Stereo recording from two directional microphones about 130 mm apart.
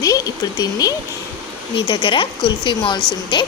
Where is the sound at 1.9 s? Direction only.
40° left (ahead or behind).